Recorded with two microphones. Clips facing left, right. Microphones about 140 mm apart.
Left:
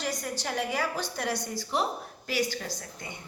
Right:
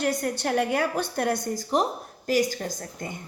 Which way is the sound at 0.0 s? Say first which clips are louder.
Right 7 dB; 60° right (ahead or behind).